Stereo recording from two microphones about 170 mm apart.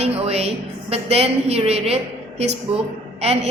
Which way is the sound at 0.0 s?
35° right (ahead or behind).